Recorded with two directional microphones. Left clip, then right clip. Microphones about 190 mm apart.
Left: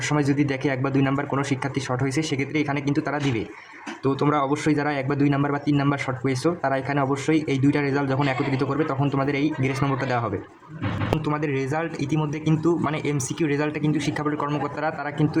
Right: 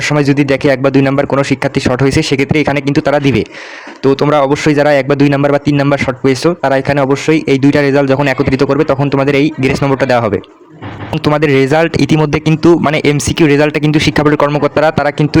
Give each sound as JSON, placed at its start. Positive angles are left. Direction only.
{"t": 0.0, "sound": "a man's voice", "side_deg": -40}